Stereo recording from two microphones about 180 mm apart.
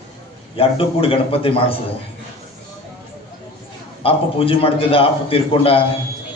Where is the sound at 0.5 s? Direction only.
30° left (ahead or behind).